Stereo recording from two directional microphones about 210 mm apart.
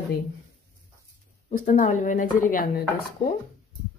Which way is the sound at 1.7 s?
35° left (ahead or behind).